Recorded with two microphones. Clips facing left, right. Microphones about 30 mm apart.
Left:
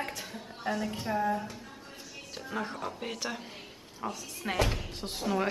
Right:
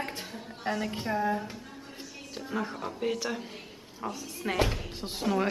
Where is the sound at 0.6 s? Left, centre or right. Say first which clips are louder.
Right 1 dB; centre.